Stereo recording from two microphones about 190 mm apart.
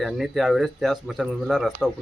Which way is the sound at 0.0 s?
Centre (ahead or behind).